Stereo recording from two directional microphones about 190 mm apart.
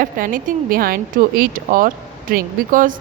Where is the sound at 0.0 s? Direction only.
45° right (ahead or behind).